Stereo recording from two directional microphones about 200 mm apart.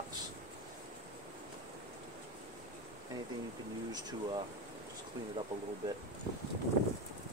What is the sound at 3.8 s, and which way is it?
Speech, 20° right (ahead or behind).